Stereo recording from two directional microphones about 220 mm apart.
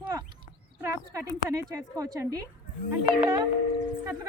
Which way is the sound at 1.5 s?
15° right (ahead or behind).